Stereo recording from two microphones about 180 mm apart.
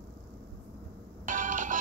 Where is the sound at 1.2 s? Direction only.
45° right (ahead or behind).